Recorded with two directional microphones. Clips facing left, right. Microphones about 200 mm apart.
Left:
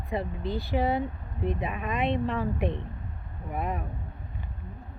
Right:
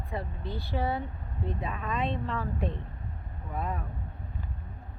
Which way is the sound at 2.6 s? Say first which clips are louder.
Left 4 dB; 75° left (ahead or behind).